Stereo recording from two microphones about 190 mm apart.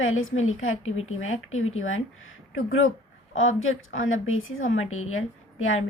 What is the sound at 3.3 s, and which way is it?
A woman's voice, 90° left.